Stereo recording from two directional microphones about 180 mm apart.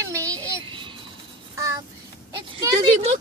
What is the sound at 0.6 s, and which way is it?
Vehicle, 25° right (ahead or behind).